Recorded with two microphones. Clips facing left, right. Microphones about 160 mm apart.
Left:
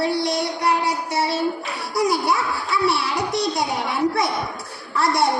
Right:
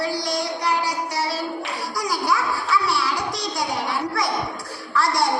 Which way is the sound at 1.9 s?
25° left (ahead or behind).